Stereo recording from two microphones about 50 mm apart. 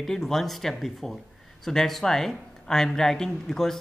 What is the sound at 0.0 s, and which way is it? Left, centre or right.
Speech, centre.